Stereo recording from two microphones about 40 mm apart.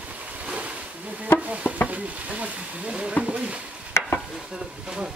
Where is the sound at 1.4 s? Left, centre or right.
Right.